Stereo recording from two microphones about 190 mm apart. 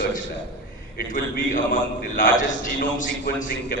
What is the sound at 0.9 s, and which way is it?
A man's voice, 45° left (ahead or behind).